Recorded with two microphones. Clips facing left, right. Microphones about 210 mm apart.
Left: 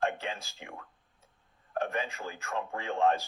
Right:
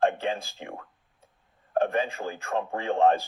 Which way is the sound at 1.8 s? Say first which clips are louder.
Right 6 dB; 30° right (ahead or behind).